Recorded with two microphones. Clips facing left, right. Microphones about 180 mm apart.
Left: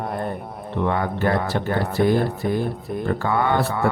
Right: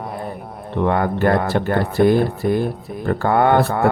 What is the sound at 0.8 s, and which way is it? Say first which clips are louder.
Speech: right 5 dB; 55° right (ahead or behind).